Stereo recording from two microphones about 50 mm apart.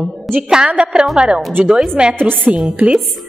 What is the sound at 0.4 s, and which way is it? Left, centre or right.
A woman's voice, centre.